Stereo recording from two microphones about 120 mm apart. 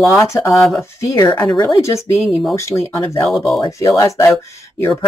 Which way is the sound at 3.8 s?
25° left (ahead or behind).